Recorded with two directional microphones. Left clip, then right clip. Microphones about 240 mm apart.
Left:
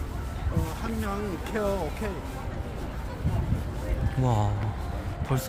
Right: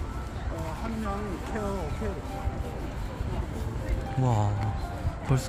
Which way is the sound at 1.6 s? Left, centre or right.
Left.